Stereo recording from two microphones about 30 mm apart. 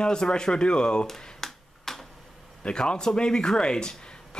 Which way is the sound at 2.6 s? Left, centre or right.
Left.